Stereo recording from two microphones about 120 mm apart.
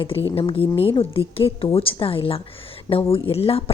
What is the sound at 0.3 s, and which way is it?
A woman's voice, 50° left (ahead or behind).